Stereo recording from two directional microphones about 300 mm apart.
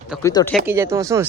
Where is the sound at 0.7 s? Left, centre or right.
Centre.